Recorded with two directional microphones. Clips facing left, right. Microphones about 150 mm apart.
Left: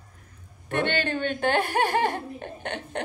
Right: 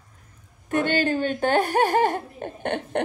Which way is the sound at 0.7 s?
40° right (ahead or behind).